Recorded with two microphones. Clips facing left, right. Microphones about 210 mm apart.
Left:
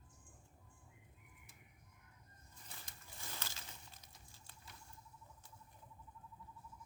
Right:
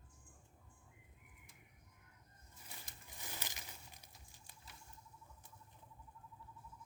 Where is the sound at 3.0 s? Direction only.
15° right (ahead or behind).